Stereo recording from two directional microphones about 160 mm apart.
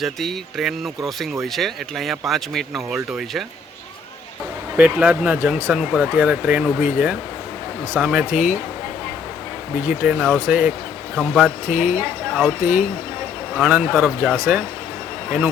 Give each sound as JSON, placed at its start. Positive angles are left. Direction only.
{"t": 0.0, "sound": "speech", "side_deg": 0}
{"t": 4.8, "sound": "speech", "side_deg": -10}
{"t": 9.7, "sound": "speech", "side_deg": -10}